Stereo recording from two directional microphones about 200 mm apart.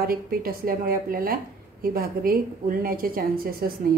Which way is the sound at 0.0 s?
45° right (ahead or behind).